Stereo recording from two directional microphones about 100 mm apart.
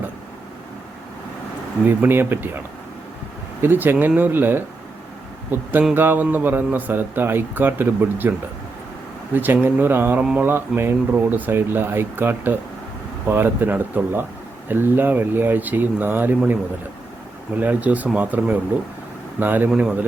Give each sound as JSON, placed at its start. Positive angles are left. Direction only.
{"t": 1.8, "sound": "a man's voice", "side_deg": -20}
{"t": 3.6, "sound": "a man's voice", "side_deg": -20}
{"t": 17.5, "sound": "a man's voice", "side_deg": -15}